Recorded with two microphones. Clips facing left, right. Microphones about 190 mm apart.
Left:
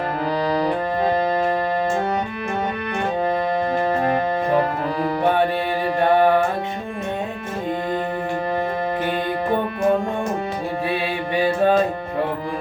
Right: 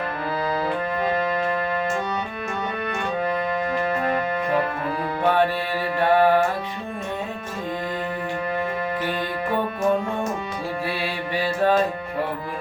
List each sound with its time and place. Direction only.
0.4 s music: 40° left (ahead or behind)
3.8 s keyboard: 40° left (ahead or behind)
11.3 s music: 20° left (ahead or behind)